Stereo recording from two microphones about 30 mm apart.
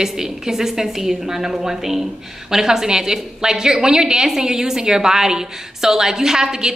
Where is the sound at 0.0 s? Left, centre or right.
Centre.